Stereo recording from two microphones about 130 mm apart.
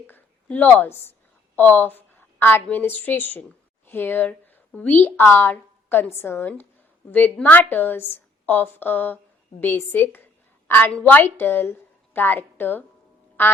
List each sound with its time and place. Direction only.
0.1 s a woman's voice: 10° left (ahead or behind)